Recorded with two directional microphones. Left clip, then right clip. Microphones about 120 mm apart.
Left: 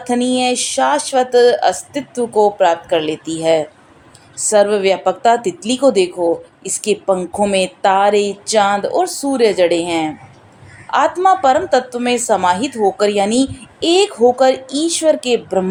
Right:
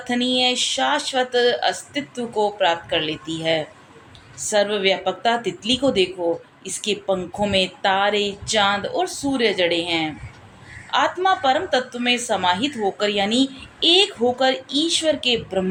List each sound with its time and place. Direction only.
0.0 s a woman's voice: 55° left (ahead or behind)